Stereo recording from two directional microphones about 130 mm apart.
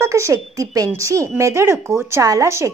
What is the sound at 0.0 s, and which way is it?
Speech, 20° right (ahead or behind).